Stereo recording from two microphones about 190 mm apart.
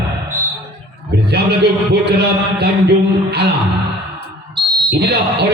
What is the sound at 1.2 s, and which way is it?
A man's voice, 60° right (ahead or behind).